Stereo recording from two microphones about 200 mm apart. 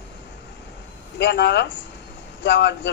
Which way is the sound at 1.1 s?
55° left (ahead or behind).